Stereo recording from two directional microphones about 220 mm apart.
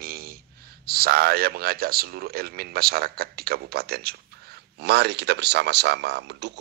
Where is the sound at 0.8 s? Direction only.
45° right (ahead or behind).